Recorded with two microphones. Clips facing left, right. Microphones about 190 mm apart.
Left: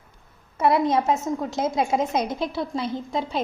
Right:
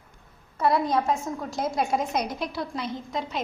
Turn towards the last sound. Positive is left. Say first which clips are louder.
# left 4 dB
turn(degrees=30)  # may be behind; listen again after turning